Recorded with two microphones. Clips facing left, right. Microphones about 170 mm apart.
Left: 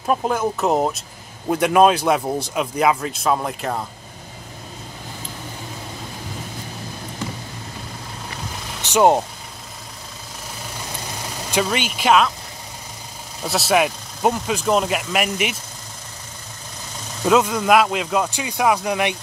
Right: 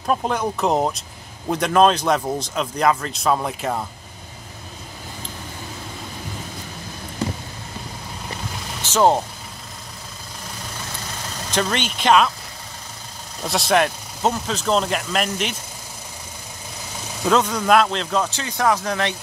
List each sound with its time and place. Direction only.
0.0 s speech: 5° left (ahead or behind)
8.8 s speech: 15° left (ahead or behind)
11.2 s speech: 10° left (ahead or behind)
13.4 s speech: 5° left (ahead or behind)
17.2 s speech: 10° left (ahead or behind)